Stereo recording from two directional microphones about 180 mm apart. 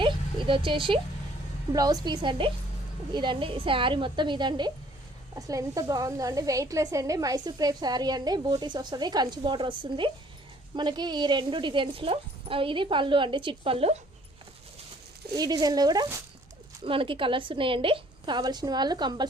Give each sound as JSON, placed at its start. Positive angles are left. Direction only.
{"t": 0.0, "sound": "a sound", "side_deg": -30}
{"t": 1.7, "sound": "a woman's voice", "side_deg": -20}
{"t": 15.4, "sound": "a woman's voice", "side_deg": -20}
{"t": 16.8, "sound": "a woman's voice", "side_deg": -30}